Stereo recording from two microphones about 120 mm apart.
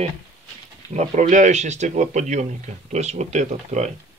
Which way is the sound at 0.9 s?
90° right.